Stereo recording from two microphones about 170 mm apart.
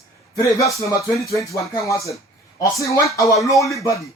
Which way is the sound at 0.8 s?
15° left (ahead or behind).